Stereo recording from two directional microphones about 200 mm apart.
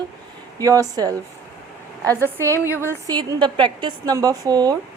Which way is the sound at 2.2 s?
10° left (ahead or behind).